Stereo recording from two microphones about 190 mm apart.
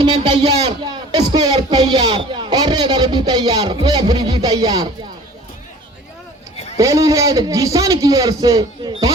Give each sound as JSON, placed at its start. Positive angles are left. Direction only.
{"t": 0.2, "sound": "a man's voice", "side_deg": -35}
{"t": 6.7, "sound": "a man's voice", "side_deg": -15}